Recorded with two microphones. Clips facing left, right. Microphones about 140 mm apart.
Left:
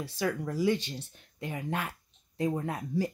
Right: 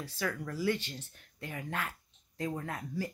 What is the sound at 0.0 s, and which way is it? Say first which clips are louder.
Speech: left 5 dB; 20° left (ahead or behind).